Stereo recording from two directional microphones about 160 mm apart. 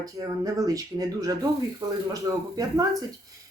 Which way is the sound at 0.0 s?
25° right (ahead or behind).